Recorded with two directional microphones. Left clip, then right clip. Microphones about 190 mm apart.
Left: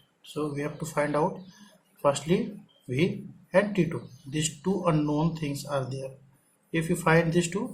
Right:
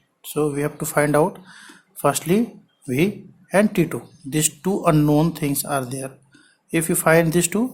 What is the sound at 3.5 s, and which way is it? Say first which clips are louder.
Speech: right 6 dB; 55° right (ahead or behind).